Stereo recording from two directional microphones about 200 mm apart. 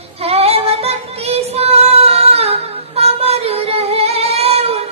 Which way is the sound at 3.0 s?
30° right (ahead or behind).